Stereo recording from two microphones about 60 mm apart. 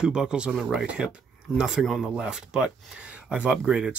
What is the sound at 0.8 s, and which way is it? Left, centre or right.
Speech, centre.